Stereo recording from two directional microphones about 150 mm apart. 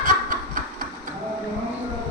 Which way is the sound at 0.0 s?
70° right (ahead or behind).